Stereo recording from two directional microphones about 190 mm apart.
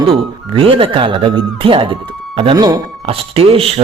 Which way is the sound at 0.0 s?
30° right (ahead or behind).